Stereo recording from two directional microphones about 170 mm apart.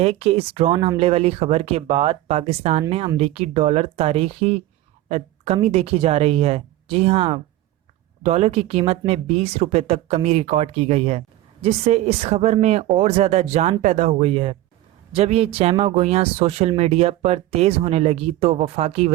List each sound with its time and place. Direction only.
0.0 s speech: 35° right (ahead or behind)
5.0 s a sound: 40° right (ahead or behind)
5.6 s speech: 35° right (ahead or behind)